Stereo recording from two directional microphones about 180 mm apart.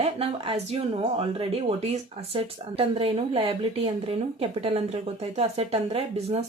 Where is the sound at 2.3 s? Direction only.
30° right (ahead or behind).